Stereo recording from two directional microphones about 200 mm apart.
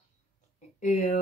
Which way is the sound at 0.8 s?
35° left (ahead or behind).